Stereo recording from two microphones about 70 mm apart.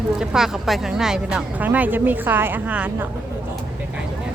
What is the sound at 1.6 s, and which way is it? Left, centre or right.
A woman's voice, right.